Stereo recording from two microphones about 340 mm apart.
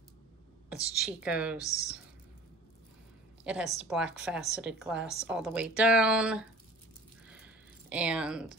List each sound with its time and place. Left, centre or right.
0.9 s speech: centre
3.4 s speech: centre
7.2 s a sound: centre